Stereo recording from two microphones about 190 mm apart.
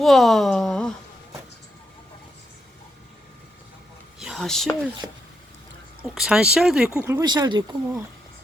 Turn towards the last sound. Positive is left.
turn(degrees=-20)  # may be behind; listen again after turning